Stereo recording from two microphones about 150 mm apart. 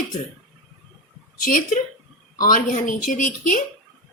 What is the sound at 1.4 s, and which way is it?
A woman's voice, 65° left (ahead or behind).